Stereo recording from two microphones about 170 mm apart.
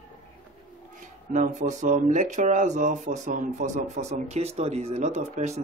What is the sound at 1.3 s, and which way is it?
Speech, 45° right (ahead or behind).